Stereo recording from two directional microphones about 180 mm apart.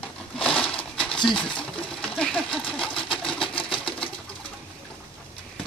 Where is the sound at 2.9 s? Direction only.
30° left (ahead or behind).